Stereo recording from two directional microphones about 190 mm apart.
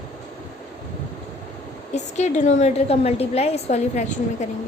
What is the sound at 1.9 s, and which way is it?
A woman's voice, 40° left (ahead or behind).